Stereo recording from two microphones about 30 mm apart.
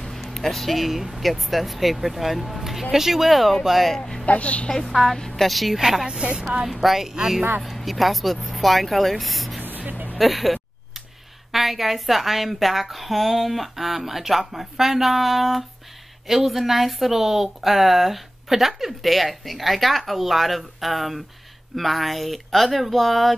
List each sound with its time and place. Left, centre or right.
0.2 s music: centre
0.7 s a woman's voice: centre
4.3 s a woman's voice: left
4.8 s a woman's voice: centre
5.8 s speech: centre
6.0 s a woman's voice: right
6.7 s a woman's voice: centre
9.6 s music: right
10.1 s a woman's voice: centre